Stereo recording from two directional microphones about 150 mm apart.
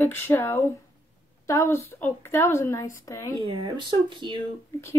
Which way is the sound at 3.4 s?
30° right (ahead or behind).